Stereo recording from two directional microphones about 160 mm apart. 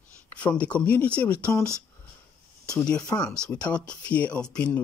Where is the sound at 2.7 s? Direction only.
5° left (ahead or behind).